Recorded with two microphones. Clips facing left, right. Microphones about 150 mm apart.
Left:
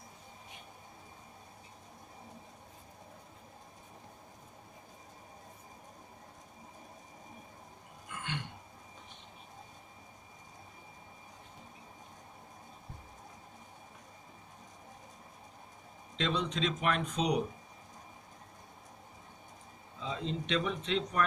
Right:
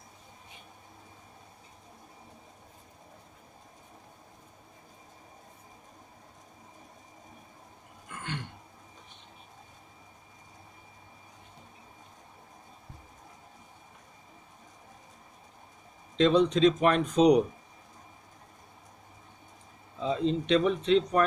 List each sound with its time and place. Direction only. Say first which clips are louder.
16.1 s speech: right 11 dB; 40° right (ahead or behind)
20.1 s speech: right 9 dB; 35° right (ahead or behind)